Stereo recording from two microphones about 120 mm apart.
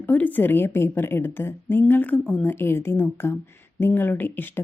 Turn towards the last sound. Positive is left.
turn(degrees=15)  # may be behind; listen again after turning